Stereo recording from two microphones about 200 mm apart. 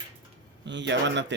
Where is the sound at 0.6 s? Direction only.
60° right (ahead or behind).